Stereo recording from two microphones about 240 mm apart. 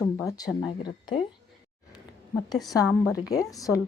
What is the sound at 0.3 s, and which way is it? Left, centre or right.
Speech, centre.